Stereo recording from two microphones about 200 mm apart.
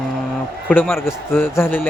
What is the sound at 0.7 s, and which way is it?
A man's voice, 10° left (ahead or behind).